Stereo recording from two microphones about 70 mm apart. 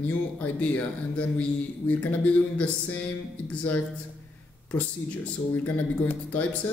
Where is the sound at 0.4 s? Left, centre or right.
Left.